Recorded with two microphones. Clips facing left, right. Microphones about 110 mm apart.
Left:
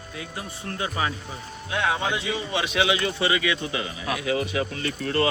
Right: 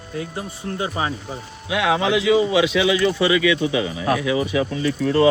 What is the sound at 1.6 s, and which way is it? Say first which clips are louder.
Speech: right 6 dB; 90° right.